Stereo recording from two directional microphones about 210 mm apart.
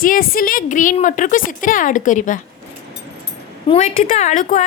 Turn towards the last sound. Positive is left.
turn(degrees=35)  # may be behind; listen again after turning